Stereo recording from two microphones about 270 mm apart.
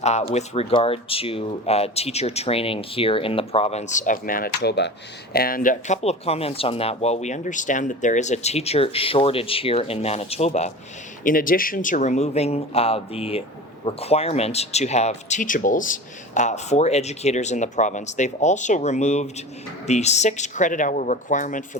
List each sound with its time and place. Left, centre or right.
0.0 s speech: left